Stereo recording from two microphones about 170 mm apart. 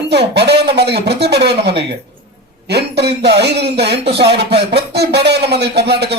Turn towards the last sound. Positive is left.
turn(degrees=-75)  # may be behind; listen again after turning